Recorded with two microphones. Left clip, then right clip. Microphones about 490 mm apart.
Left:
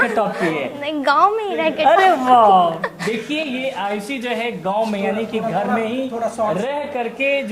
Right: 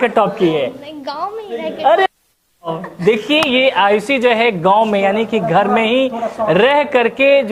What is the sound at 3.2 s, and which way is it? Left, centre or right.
A man's voice, right.